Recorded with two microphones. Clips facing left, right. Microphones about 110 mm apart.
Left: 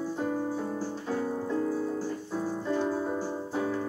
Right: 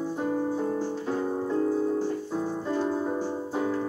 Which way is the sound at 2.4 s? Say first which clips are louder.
Left 1 dB; 25° right (ahead or behind).